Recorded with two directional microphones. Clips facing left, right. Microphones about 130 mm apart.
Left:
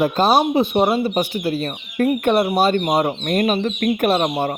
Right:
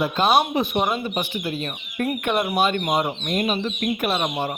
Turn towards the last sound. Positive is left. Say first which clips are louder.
# left 6 dB
turn(degrees=40)  # may be behind; listen again after turning